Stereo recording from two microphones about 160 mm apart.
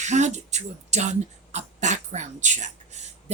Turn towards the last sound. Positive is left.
turn(degrees=-45)  # may be behind; listen again after turning